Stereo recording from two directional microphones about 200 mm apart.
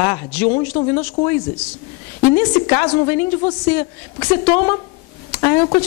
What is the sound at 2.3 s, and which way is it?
A woman's voice, 15° left (ahead or behind).